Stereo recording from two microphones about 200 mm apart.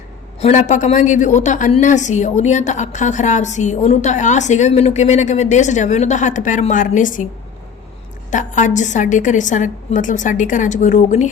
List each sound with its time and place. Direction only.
0.3 s a woman's voice: 35° left (ahead or behind)
8.3 s a woman's voice: 40° left (ahead or behind)